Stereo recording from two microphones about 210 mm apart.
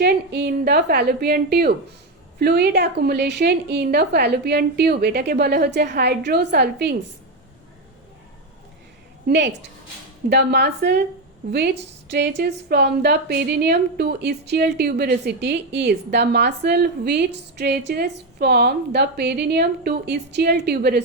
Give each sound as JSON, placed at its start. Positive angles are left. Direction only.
{"t": 0.0, "sound": "a woman's voice", "side_deg": -50}
{"t": 9.2, "sound": "a woman's voice", "side_deg": -55}
{"t": 12.1, "sound": "a woman's voice", "side_deg": -50}